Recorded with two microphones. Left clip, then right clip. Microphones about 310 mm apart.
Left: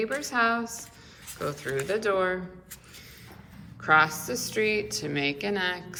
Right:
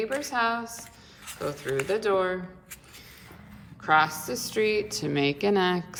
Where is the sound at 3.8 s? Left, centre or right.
Centre.